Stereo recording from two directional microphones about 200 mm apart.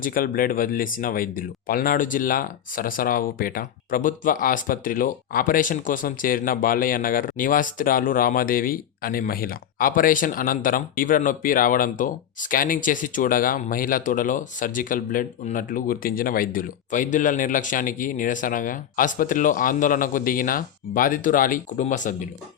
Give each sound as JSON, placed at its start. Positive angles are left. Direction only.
{"t": 0.0, "sound": "speech", "side_deg": 45}